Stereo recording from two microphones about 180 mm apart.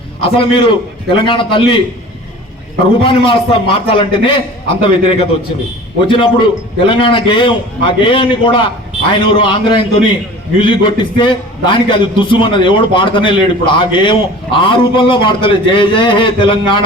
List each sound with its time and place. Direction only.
0.2 s a man's voice: 30° left (ahead or behind)
3.0 s a man's voice: 30° left (ahead or behind)